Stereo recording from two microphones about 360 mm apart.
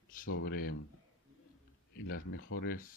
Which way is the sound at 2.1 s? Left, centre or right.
Left.